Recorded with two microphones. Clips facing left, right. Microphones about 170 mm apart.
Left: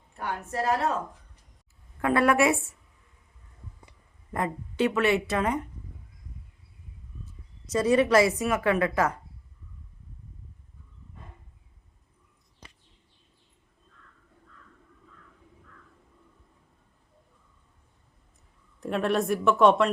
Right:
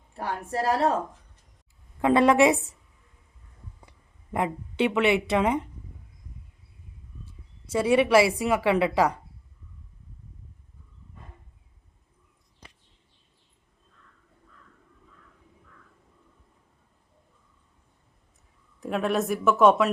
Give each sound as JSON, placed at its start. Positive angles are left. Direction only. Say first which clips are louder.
{"t": 0.2, "sound": "a woman's voice", "louder": "right 2 dB", "side_deg": -30}
{"t": 2.0, "sound": "a woman's voice", "louder": "right 3 dB", "side_deg": -20}
{"t": 4.3, "sound": "a woman's voice", "louder": "right 2 dB", "side_deg": -15}
{"t": 7.7, "sound": "a woman's voice", "louder": "right 1 dB", "side_deg": -10}
{"t": 18.8, "sound": "speech", "louder": "even", "side_deg": 0}